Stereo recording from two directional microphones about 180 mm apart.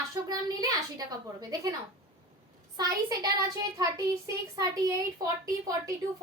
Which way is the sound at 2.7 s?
20° right (ahead or behind).